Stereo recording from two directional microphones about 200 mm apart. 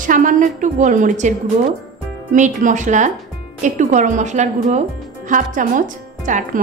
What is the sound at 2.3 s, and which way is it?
Speech, 40° right (ahead or behind).